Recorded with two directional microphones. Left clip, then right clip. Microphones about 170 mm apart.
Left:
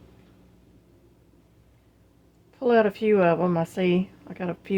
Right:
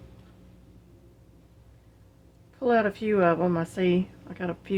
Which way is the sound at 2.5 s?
40° left (ahead or behind).